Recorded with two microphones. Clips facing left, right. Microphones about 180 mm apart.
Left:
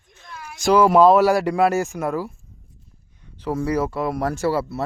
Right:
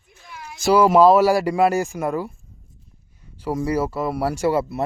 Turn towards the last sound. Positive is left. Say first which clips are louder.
# right 1 dB
turn(degrees=-15)  # may be behind; listen again after turning